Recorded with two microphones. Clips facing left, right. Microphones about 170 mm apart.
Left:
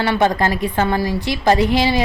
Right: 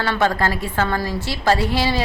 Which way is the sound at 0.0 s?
15° left (ahead or behind).